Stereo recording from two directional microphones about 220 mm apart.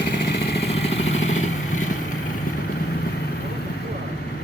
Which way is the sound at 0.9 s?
60° left (ahead or behind).